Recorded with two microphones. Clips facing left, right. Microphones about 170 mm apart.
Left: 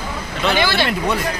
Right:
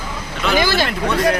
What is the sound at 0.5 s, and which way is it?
Speech, 40° right (ahead or behind).